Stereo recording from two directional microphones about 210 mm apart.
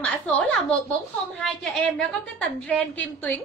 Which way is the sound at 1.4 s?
5° left (ahead or behind).